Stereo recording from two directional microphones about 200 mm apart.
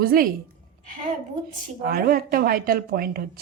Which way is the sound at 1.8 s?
50° right (ahead or behind).